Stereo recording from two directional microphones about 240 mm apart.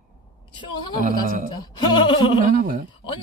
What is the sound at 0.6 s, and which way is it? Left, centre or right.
Speech, centre.